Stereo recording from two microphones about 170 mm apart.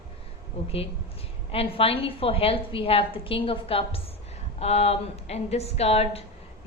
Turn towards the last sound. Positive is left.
turn(degrees=35)  # may be behind; listen again after turning